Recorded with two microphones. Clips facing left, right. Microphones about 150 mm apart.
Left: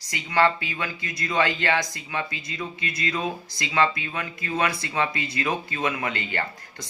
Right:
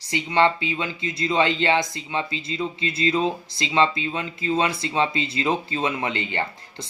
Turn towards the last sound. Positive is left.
turn(degrees=-25)  # may be behind; listen again after turning